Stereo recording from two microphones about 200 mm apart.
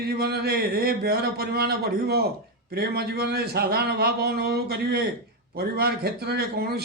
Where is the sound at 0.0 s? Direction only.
50° right (ahead or behind).